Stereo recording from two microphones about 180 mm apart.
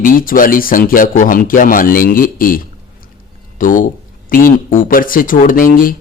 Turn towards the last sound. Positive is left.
turn(degrees=50)  # may be behind; listen again after turning